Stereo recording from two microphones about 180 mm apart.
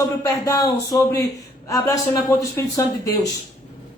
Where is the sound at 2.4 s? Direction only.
20° left (ahead or behind).